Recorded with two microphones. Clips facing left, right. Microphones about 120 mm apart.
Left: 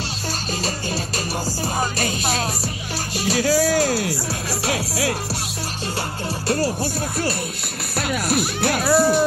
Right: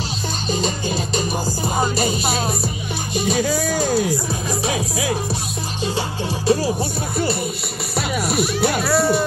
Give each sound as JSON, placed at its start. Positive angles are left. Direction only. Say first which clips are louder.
{"t": 0.7, "sound": "music", "louder": "right 3 dB", "side_deg": -20}
{"t": 2.0, "sound": "speech", "louder": "right 3 dB", "side_deg": -5}
{"t": 6.8, "sound": "speech", "louder": "right 1 dB", "side_deg": 0}